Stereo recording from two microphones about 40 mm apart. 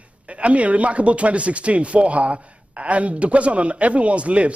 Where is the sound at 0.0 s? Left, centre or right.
Right.